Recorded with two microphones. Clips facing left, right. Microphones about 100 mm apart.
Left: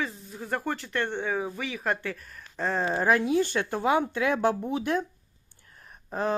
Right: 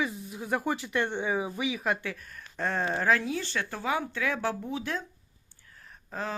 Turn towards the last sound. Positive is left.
turn(degrees=20)  # may be behind; listen again after turning